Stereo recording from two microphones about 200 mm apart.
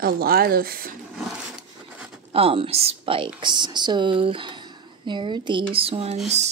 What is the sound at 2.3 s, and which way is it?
Speech, 30° right (ahead or behind).